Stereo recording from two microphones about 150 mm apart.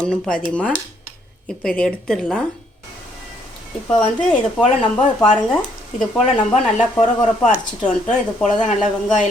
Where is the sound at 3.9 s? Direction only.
5° left (ahead or behind).